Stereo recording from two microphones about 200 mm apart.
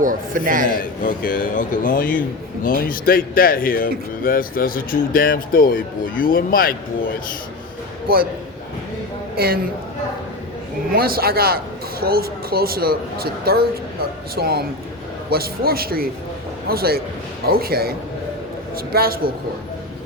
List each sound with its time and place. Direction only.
0.0 s speech: 40° right (ahead or behind)
0.7 s speech: 45° left (ahead or behind)
8.0 s a man's voice: 50° right (ahead or behind)
9.3 s a man's voice: 50° right (ahead or behind)
10.9 s speech: 50° right (ahead or behind)
18.9 s speech: 50° right (ahead or behind)